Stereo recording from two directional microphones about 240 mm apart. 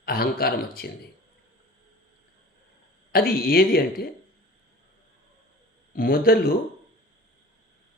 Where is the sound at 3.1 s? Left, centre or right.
Left.